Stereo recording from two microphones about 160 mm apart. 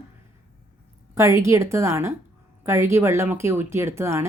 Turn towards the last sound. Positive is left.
turn(degrees=-15)  # may be behind; listen again after turning